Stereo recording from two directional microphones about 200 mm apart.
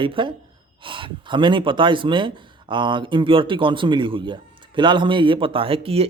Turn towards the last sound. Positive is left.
turn(degrees=-30)  # may be behind; listen again after turning